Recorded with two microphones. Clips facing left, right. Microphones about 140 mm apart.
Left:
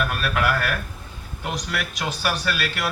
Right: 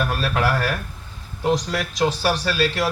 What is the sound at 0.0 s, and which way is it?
Speech, 30° right (ahead or behind).